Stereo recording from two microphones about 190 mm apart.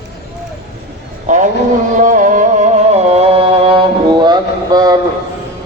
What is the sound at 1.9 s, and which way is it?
Music, 45° right (ahead or behind).